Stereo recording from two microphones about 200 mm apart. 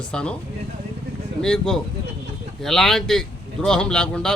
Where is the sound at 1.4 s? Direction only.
5° left (ahead or behind).